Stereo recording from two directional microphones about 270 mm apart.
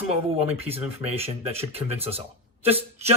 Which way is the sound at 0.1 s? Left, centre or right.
Right.